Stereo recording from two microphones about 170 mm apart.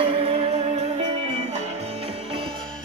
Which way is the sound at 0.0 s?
35° right (ahead or behind).